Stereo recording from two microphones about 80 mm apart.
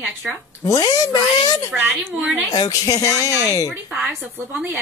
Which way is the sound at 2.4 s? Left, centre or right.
Left.